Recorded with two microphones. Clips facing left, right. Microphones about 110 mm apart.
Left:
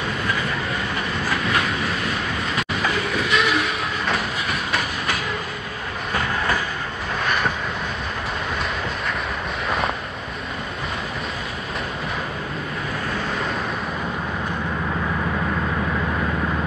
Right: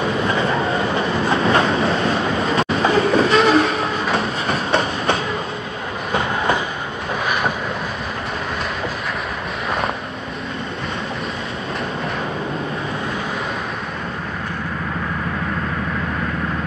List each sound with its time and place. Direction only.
0.2 s train: 30° right (ahead or behind)